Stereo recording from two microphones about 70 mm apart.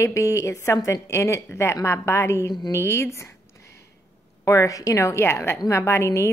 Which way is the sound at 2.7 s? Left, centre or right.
Left.